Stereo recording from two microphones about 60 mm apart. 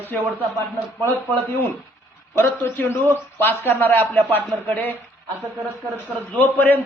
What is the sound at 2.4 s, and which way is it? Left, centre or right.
Speech, left.